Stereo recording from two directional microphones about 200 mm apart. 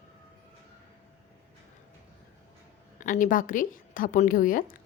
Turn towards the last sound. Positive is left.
turn(degrees=45)  # may be behind; listen again after turning